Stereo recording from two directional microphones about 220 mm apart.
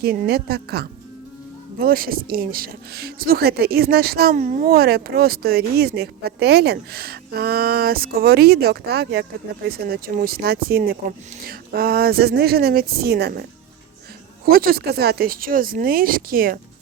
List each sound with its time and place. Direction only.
0.0 s speech: 45° right (ahead or behind)
14.4 s speech: 45° right (ahead or behind)